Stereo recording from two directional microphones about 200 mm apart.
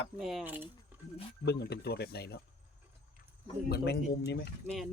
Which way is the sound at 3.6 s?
55° left (ahead or behind).